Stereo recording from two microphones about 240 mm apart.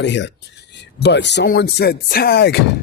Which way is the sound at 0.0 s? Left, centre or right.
Left.